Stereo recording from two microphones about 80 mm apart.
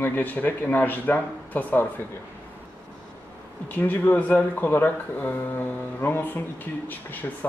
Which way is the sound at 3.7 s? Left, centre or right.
Left.